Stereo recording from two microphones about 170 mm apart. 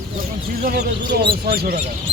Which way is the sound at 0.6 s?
70° right (ahead or behind).